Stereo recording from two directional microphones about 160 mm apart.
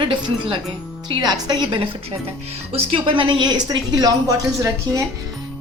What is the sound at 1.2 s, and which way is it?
A woman's voice, 25° right (ahead or behind).